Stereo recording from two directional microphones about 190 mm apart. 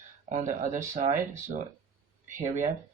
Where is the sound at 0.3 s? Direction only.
40° right (ahead or behind).